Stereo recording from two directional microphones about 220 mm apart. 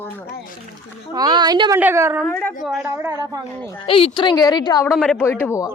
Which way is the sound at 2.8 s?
10° right (ahead or behind).